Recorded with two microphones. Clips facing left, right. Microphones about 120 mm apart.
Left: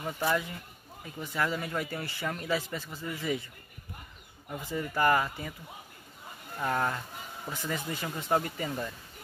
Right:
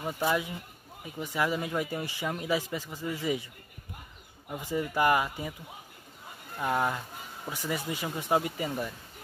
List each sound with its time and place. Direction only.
0.0 s speech: 15° right (ahead or behind)
4.5 s speech: 15° right (ahead or behind)
6.6 s speech: 15° right (ahead or behind)